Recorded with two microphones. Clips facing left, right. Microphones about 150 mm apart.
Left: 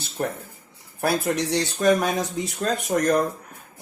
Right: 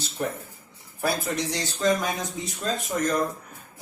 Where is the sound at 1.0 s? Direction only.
70° left (ahead or behind).